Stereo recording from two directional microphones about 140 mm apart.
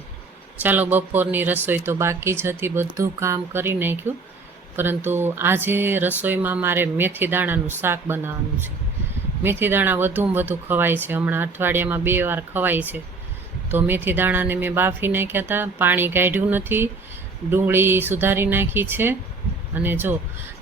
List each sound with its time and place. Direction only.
0.6 s speech: 15° right (ahead or behind)
9.4 s speech: 15° right (ahead or behind)